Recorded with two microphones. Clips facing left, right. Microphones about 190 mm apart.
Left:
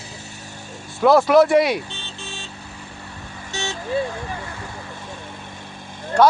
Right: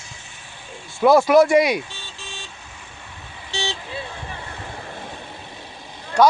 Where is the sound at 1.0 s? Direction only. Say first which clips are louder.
Even; centre (ahead or behind).